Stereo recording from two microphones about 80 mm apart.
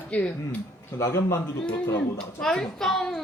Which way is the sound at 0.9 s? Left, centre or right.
Left.